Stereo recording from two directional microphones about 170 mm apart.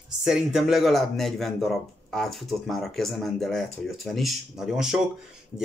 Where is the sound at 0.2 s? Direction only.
Centre (ahead or behind).